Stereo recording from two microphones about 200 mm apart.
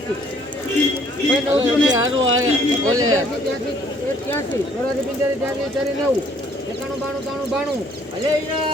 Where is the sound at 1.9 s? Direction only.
80° right.